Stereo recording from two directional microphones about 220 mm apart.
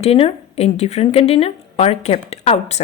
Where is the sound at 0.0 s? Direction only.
25° left (ahead or behind).